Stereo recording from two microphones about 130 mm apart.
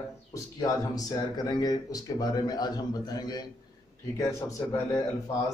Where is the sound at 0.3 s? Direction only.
25° left (ahead or behind).